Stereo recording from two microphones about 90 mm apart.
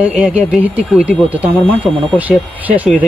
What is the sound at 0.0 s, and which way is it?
A man's voice, 15° right (ahead or behind).